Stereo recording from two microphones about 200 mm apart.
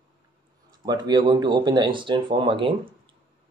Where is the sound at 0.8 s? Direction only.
20° right (ahead or behind).